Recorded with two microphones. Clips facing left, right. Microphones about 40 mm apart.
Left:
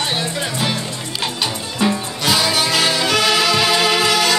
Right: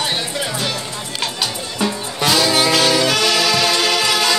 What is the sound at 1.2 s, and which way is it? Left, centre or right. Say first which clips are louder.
Music: left 1 dB; centre.